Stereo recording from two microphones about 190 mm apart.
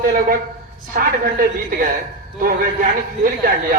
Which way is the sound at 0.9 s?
45° right (ahead or behind).